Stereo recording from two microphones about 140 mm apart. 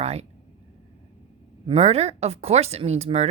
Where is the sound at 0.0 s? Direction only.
50° right (ahead or behind).